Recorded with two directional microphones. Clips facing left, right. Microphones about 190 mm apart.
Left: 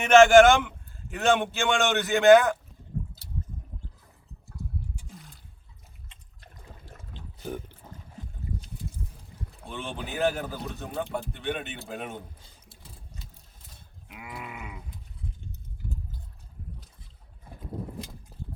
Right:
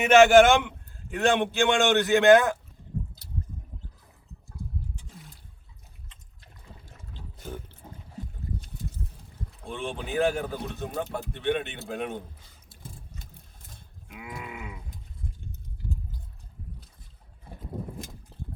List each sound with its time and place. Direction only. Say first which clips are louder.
0.0 s a man's voice: left 1 dB; 5° right (ahead or behind)
7.4 s boat: left 4 dB; 10° left (ahead or behind)
9.7 s a man's voice: right 5 dB; centre (ahead or behind)
12.8 s vehicle: right 4 dB; 50° right (ahead or behind)
14.1 s livestock: right 1 dB; 5° left (ahead or behind)
18.3 s engine: right 1 dB; 10° left (ahead or behind)